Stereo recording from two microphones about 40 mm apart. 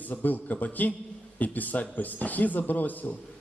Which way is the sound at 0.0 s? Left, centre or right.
Left.